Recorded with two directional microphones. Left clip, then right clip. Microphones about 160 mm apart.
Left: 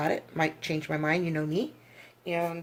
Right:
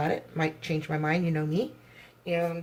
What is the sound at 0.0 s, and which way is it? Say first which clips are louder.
Speech: left 1 dB; 50° left (ahead or behind).